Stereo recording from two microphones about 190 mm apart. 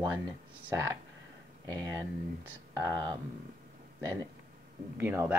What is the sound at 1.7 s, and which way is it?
Speech, 20° right (ahead or behind).